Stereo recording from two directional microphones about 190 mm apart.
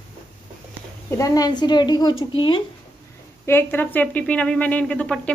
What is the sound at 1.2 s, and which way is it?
Speech, 20° left (ahead or behind).